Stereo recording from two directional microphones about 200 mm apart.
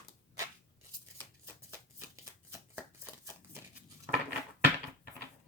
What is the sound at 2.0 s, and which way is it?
Shuffling cards, 15° right (ahead or behind).